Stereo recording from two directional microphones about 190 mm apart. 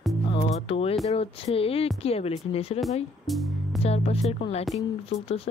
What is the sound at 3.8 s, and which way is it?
Speech, 35° left (ahead or behind).